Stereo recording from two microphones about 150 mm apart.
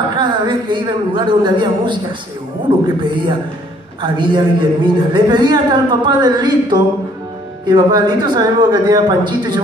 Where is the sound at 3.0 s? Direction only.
30° right (ahead or behind).